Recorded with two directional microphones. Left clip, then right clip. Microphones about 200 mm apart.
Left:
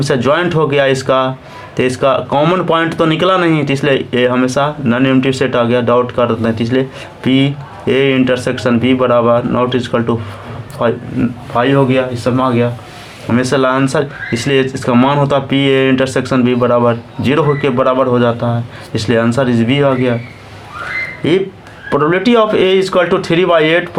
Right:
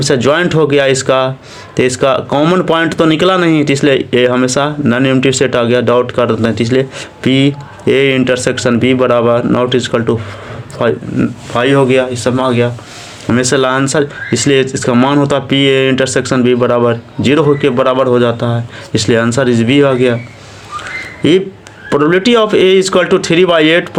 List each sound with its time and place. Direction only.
0.0 s speech: 35° right (ahead or behind)
21.2 s speech: 40° right (ahead or behind)